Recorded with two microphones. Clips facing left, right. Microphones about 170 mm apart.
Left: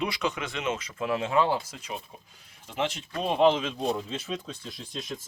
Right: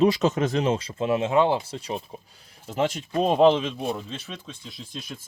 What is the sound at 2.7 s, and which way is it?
Speech, 45° right (ahead or behind).